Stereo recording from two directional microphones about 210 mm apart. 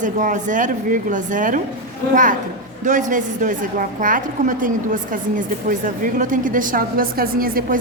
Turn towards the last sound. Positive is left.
turn(degrees=-45)  # may be behind; listen again after turning